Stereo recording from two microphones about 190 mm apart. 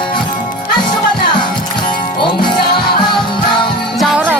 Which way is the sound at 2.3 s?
25° left (ahead or behind).